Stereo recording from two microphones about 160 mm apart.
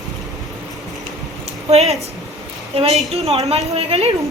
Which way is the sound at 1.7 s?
40° right (ahead or behind).